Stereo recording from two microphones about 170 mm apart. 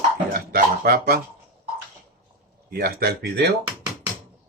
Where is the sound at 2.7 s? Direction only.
65° right (ahead or behind).